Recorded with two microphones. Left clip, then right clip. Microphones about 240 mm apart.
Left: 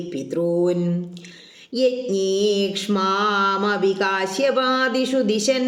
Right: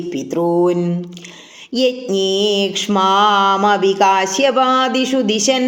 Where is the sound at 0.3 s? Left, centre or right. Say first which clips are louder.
Right 5 dB; centre.